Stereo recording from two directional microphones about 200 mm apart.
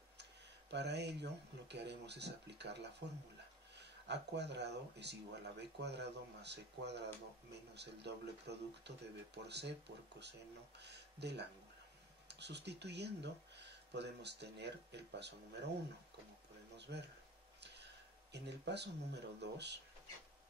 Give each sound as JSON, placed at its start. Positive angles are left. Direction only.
{"t": 0.2, "sound": "speech", "side_deg": -60}
{"t": 16.7, "sound": "speech", "side_deg": -60}
{"t": 18.3, "sound": "speech", "side_deg": -60}